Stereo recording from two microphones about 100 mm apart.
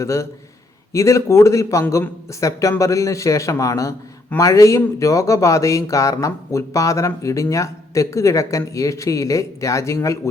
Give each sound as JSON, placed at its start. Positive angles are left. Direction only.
{"t": 0.0, "sound": "speech", "side_deg": 30}